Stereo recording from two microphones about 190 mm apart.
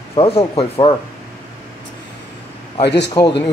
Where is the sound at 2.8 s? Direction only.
60° left (ahead or behind).